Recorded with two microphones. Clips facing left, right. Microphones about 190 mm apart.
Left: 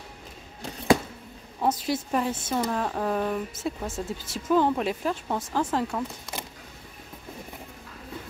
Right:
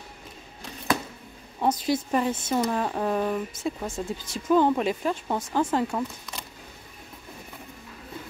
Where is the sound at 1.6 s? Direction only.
Centre (ahead or behind).